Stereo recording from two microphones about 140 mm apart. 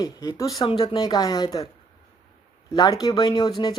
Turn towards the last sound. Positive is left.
turn(degrees=30)  # may be behind; listen again after turning